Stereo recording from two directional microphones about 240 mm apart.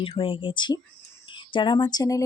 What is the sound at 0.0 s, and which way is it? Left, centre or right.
Speech, left.